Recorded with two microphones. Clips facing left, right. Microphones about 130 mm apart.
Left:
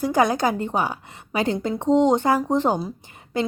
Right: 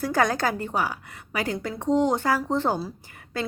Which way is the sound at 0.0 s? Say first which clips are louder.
Left 4 dB; 15° left (ahead or behind).